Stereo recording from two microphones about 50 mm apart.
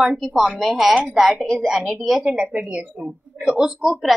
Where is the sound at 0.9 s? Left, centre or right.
Centre.